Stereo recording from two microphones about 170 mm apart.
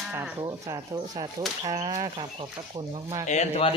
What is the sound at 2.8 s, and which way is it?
Speech, 30° right (ahead or behind).